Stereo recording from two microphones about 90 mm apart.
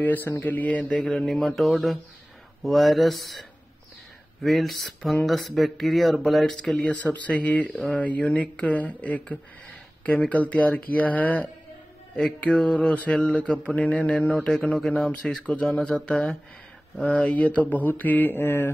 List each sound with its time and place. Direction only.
0.0 s speech: 20° left (ahead or behind)
0.9 s speech: 5° left (ahead or behind); by 18.7 s 25° left (ahead or behind)